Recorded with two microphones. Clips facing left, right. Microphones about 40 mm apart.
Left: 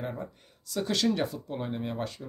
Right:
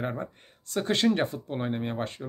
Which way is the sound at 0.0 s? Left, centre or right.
Right.